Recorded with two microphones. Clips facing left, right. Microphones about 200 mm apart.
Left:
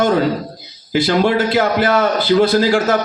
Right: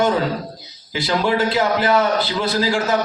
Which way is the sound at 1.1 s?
60° left (ahead or behind).